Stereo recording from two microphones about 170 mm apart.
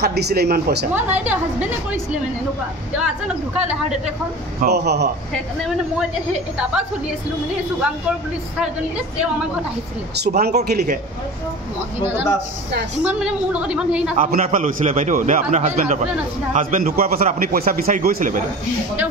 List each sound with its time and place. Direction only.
0.0 s speech: 70° right (ahead or behind)
0.9 s a woman's voice: 10° right (ahead or behind)
3.6 s a woman's voice: 5° right (ahead or behind)
4.6 s speech: 75° right (ahead or behind)
10.1 s speech: 70° right (ahead or behind)
12.0 s a woman's voice: 10° right (ahead or behind)
14.1 s a man's voice: 50° right (ahead or behind)